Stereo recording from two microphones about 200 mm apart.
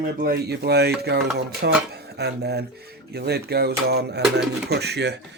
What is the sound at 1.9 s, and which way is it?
Stir, 55° right (ahead or behind).